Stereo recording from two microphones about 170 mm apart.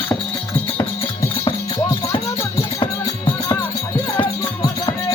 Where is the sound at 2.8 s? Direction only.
25° left (ahead or behind).